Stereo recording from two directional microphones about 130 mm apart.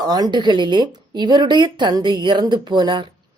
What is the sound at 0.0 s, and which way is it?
A woman's voice, 30° right (ahead or behind).